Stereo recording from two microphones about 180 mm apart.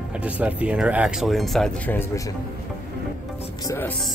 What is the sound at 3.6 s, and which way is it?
Music, 15° left (ahead or behind).